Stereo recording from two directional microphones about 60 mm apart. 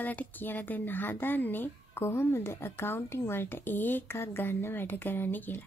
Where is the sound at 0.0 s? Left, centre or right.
Left.